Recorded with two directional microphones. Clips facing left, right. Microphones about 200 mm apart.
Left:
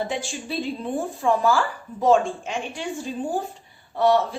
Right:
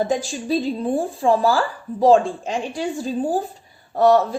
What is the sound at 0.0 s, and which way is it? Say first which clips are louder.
Speech: right 6 dB; 40° right (ahead or behind).